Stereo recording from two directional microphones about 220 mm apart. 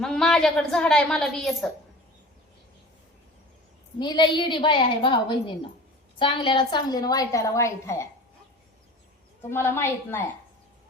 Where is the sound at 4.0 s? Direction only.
20° left (ahead or behind).